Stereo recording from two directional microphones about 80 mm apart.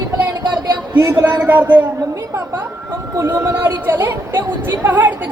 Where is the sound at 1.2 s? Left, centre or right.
Right.